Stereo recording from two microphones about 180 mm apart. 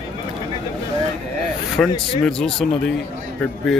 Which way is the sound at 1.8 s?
5° left (ahead or behind).